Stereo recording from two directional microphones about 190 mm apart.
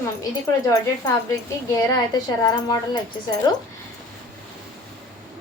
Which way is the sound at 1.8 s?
20° left (ahead or behind).